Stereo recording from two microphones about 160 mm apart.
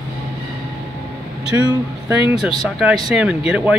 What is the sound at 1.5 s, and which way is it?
Speech, 15° right (ahead or behind).